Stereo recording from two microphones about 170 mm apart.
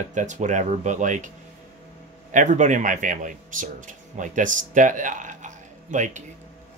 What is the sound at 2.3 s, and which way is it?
A man's voice, 45° right (ahead or behind).